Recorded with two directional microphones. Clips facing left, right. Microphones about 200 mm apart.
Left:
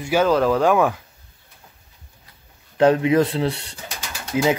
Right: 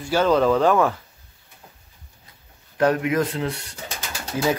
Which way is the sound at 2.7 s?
25° left (ahead or behind).